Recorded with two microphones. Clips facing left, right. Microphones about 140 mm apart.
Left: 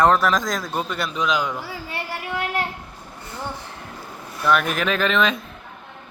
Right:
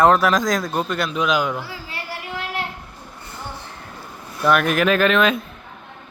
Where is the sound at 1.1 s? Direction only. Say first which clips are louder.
Right 2 dB; 10° right (ahead or behind).